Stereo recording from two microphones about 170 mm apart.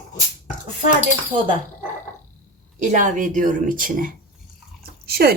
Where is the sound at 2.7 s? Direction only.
45° right (ahead or behind).